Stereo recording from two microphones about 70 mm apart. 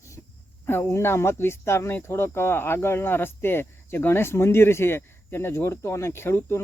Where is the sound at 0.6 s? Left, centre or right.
Left.